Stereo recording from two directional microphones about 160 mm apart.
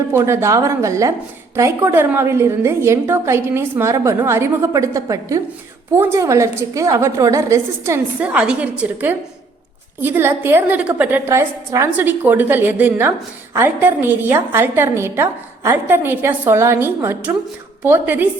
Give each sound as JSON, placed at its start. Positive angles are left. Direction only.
{"t": 0.1, "sound": "a woman's voice", "side_deg": -15}